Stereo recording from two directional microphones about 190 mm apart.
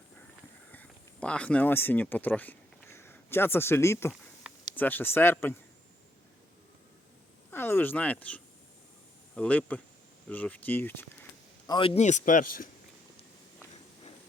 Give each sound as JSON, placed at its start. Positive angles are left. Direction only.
{"t": 0.7, "sound": "speech", "side_deg": 5}
{"t": 7.5, "sound": "speech", "side_deg": 10}